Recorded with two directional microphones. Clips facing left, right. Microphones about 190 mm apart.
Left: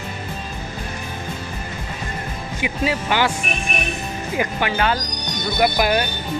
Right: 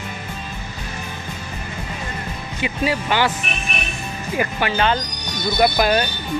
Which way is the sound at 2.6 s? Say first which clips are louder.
Right 1 dB; 15° left (ahead or behind).